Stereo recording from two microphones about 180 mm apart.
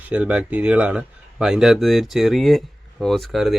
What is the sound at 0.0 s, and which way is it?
Speech, 10° right (ahead or behind).